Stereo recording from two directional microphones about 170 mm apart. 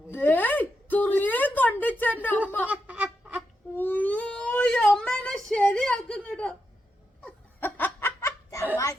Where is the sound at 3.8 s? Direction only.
10° left (ahead or behind).